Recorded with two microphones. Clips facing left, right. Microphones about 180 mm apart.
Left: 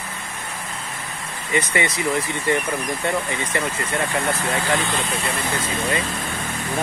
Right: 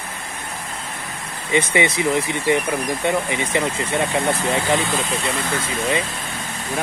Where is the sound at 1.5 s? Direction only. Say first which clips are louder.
Right 4 dB; 20° right (ahead or behind).